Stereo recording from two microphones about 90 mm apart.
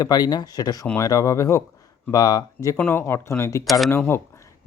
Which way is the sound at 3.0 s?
30° left (ahead or behind).